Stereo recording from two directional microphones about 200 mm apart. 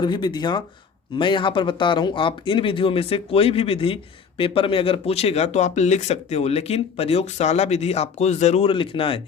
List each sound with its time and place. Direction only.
0.0 s speech: 25° left (ahead or behind)